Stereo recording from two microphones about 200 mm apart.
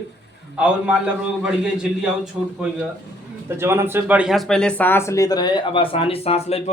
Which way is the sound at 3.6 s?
10° right (ahead or behind).